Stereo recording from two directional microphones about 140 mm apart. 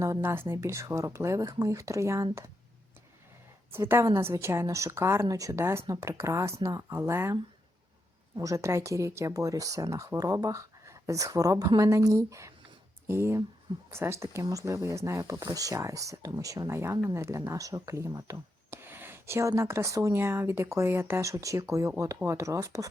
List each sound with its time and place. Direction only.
0.0 s speech: 20° right (ahead or behind)
3.7 s speech: 15° right (ahead or behind)
8.4 s speech: 20° right (ahead or behind)